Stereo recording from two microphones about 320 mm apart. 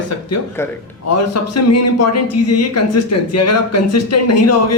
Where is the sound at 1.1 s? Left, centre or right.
Left.